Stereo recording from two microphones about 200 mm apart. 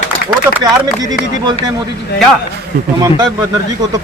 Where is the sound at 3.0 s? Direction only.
20° right (ahead or behind).